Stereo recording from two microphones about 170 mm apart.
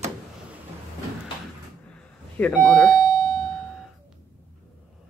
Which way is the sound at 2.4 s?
10° left (ahead or behind).